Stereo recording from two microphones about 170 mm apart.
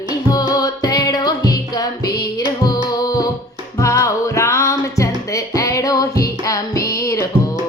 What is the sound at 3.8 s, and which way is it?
Music, 20° left (ahead or behind).